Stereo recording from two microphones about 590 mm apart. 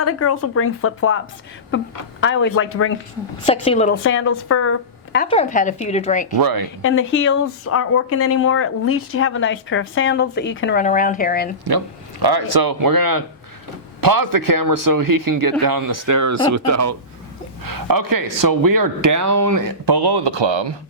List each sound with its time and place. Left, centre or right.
0.0 s speech: left
3.4 s a woman's voice: centre
6.3 s a man's voice: right
6.8 s speech: centre
12.2 s a man's voice: right